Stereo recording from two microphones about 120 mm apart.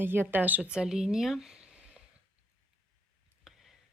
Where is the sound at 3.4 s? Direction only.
Centre (ahead or behind).